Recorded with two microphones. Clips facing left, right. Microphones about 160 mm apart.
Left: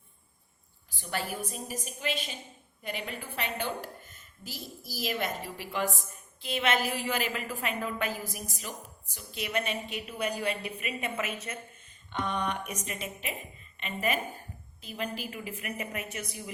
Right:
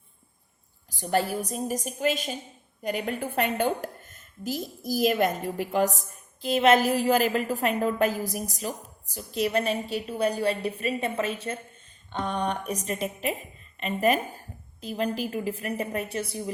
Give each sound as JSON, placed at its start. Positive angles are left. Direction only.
{"t": 0.9, "sound": "a woman's voice", "side_deg": -40}